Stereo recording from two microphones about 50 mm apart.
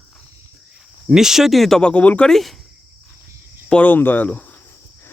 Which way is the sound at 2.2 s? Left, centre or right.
Centre.